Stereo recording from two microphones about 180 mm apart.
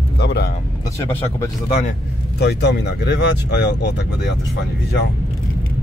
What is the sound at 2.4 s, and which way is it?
Speech, 70° left (ahead or behind).